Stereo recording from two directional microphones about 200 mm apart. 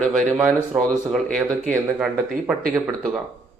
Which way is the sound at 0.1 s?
5° left (ahead or behind).